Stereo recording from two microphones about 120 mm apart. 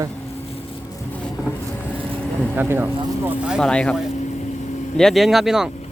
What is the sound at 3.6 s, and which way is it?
Speech, 10° left (ahead or behind).